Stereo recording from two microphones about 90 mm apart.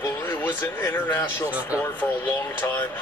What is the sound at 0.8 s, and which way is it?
Speech, 20° left (ahead or behind).